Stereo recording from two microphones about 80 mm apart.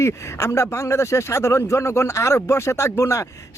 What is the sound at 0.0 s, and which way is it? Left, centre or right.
Speech, left.